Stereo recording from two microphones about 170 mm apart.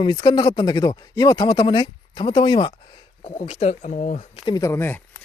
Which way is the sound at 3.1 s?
40° left (ahead or behind).